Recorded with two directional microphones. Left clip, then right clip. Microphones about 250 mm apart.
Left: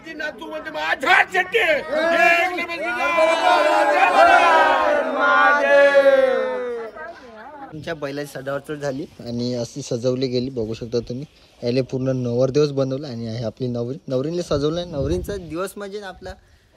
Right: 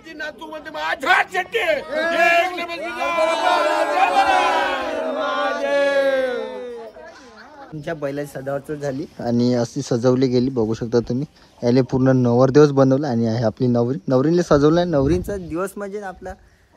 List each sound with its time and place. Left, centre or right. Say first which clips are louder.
0.2 s a man's voice: left 2 dB; centre
9.2 s a man's voice: right 8 dB; centre
13.3 s speech: right 7 dB; centre
13.8 s a man's voice: right 6 dB; centre